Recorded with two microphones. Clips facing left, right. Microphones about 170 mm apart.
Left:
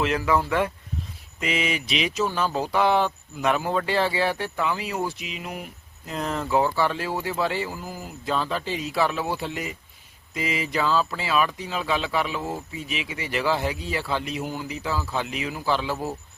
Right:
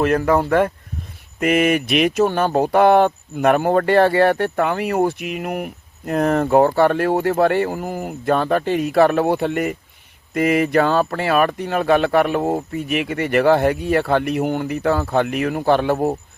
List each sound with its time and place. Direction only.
0.0 s speech: 50° right (ahead or behind)